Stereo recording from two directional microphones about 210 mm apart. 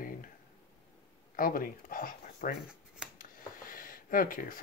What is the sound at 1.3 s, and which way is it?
Speech, 40° left (ahead or behind).